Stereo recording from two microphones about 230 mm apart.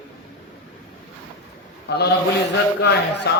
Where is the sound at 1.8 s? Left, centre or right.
Left.